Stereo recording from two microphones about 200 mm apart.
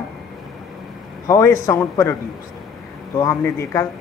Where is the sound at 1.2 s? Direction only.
15° left (ahead or behind).